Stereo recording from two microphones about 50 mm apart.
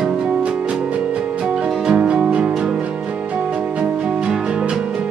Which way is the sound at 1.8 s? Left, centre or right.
Right.